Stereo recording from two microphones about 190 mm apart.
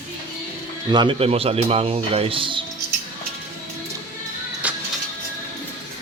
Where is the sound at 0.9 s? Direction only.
25° right (ahead or behind).